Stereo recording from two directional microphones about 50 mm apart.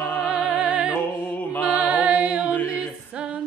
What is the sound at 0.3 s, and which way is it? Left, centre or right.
Music, centre.